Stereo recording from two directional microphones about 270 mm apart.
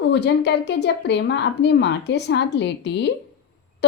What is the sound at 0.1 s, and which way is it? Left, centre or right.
A woman's voice, left.